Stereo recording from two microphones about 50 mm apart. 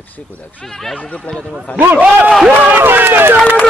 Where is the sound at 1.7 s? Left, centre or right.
Left.